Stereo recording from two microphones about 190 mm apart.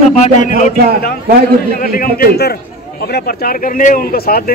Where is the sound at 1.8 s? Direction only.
50° left (ahead or behind).